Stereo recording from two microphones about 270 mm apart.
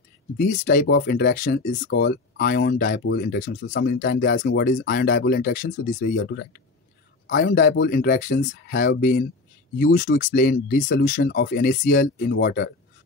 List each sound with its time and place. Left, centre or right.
0.4 s speech: left